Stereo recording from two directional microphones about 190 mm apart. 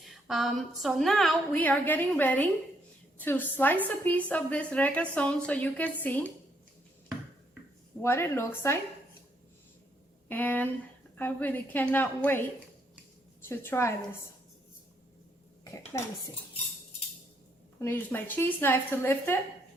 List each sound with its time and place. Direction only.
0.0 s a woman's voice: centre (ahead or behind)
8.0 s a woman's voice: 15° left (ahead or behind)
10.2 s a woman's voice: 10° left (ahead or behind)
13.4 s a woman's voice: 10° left (ahead or behind)
15.9 s a woman's voice: 20° left (ahead or behind)
17.7 s a woman's voice: 10° left (ahead or behind)